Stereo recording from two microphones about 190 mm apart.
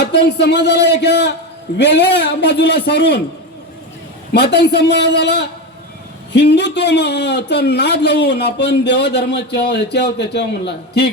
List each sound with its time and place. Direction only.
0.0 s a man's voice: 65° left (ahead or behind)
4.3 s a man's voice: 65° left (ahead or behind)